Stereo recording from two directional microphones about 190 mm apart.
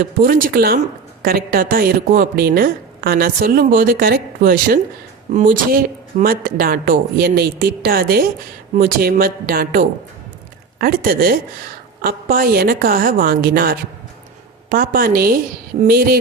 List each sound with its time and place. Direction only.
0.0 s a woman's voice: 45° right (ahead or behind)